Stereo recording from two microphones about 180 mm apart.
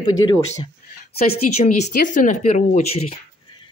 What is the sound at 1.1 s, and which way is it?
Speech, 35° left (ahead or behind).